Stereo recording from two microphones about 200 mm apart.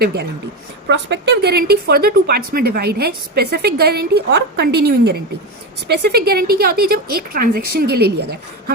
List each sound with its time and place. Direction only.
0.0 s a woman's voice: 55° right (ahead or behind)